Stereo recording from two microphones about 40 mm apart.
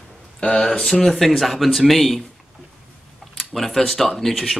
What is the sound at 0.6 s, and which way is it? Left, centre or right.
Speech, left.